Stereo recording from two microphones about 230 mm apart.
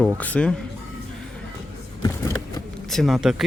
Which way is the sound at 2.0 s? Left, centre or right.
Centre.